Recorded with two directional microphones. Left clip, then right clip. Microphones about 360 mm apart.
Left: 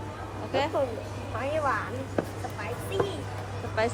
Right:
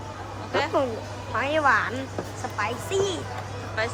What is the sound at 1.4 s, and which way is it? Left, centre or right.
Speech, right.